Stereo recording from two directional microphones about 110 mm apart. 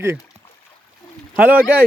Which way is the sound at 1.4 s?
15° right (ahead or behind).